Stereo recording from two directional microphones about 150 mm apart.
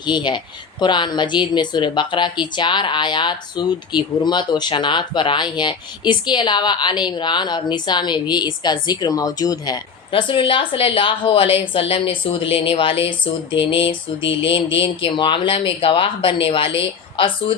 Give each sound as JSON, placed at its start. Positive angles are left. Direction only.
{"t": 0.0, "sound": "speech", "side_deg": 30}